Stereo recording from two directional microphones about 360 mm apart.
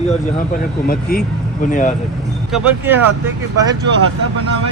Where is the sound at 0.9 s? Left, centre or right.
Left.